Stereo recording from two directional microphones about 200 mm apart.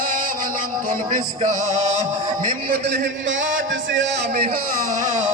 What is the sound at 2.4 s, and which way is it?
Speech, 50° right (ahead or behind).